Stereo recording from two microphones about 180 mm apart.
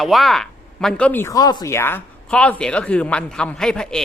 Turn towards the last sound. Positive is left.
turn(degrees=5)  # may be behind; listen again after turning